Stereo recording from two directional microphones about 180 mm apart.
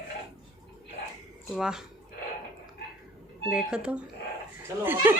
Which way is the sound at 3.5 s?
5° right (ahead or behind).